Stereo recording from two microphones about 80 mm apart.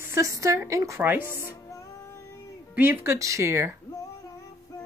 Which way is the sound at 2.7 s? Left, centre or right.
Right.